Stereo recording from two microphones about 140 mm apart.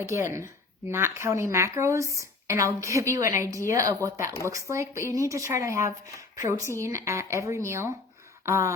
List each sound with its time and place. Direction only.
0.0 s a woman's voice: 20° right (ahead or behind)